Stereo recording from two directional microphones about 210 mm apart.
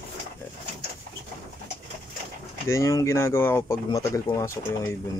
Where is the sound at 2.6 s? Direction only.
15° left (ahead or behind).